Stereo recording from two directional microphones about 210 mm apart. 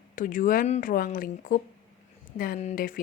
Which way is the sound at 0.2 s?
40° left (ahead or behind).